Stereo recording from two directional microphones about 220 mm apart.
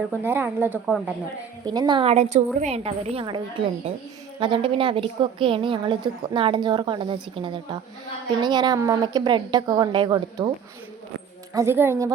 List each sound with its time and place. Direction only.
0.2 s a woman's voice: 10° right (ahead or behind)
1.7 s a woman's voice: 20° right (ahead or behind)
11.5 s a woman's voice: 10° right (ahead or behind)